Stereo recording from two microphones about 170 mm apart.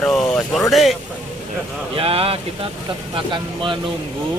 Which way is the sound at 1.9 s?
35° right (ahead or behind).